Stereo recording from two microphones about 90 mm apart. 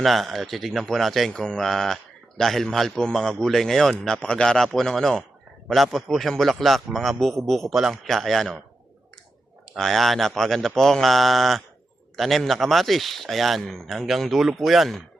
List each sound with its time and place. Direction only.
0.0 s a man's voice: centre (ahead or behind)
9.7 s a man's voice: centre (ahead or behind)